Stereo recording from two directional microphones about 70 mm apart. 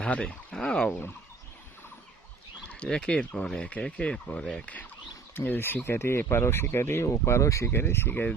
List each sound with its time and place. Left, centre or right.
0.0 s speech: centre
2.6 s speech: centre; by 7.7 s left
7.7 s speech: left